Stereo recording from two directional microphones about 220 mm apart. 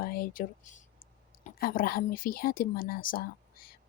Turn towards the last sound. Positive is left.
turn(degrees=40)  # may be behind; listen again after turning